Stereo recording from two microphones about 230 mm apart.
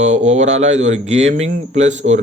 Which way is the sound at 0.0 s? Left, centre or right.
Right.